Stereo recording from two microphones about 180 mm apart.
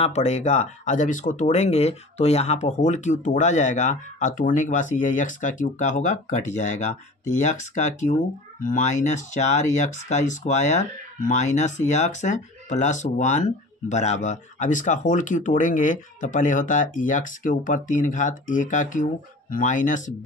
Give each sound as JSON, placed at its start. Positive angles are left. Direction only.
{"t": 0.0, "sound": "speech", "side_deg": 40}